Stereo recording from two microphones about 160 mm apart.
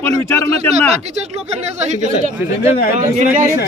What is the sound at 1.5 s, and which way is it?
Speech, 45° right (ahead or behind).